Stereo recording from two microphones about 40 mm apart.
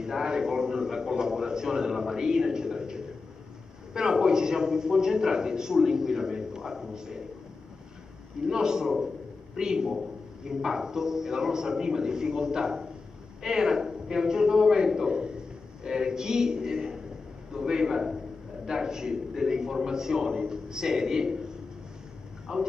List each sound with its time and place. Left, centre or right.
0.0 s a sound: centre
3.9 s a man's voice: centre
8.5 s a man's voice: centre
22.5 s speech: centre